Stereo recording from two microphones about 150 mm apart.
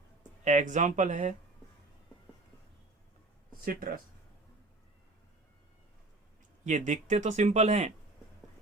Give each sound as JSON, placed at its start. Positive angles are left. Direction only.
{"t": 0.2, "sound": "speech", "side_deg": -55}
{"t": 3.6, "sound": "speech", "side_deg": -75}
{"t": 6.7, "sound": "speech", "side_deg": -55}